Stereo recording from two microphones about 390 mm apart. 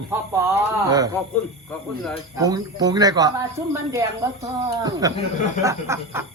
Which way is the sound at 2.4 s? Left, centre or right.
Centre.